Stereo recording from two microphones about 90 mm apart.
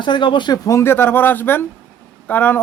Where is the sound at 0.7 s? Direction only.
30° left (ahead or behind).